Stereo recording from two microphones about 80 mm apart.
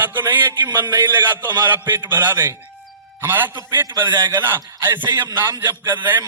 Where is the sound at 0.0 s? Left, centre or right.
Right.